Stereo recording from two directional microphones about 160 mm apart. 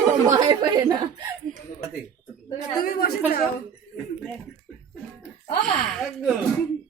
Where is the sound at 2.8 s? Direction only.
65° left (ahead or behind).